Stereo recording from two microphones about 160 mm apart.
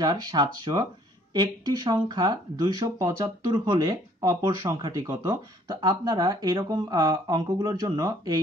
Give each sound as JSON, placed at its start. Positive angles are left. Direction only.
{"t": 0.0, "sound": "speech", "side_deg": -25}